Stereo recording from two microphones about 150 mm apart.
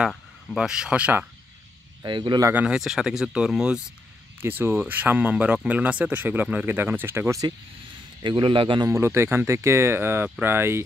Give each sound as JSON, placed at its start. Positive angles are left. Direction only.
{"t": 0.0, "sound": "speech", "side_deg": -5}
{"t": 2.0, "sound": "a man's voice", "side_deg": -30}
{"t": 2.5, "sound": "speech", "side_deg": -5}
{"t": 8.2, "sound": "a man's voice", "side_deg": -30}
{"t": 8.8, "sound": "speech", "side_deg": -20}